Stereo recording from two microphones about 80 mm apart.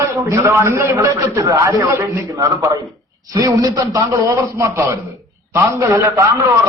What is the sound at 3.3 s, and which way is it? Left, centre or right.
A man's voice, right.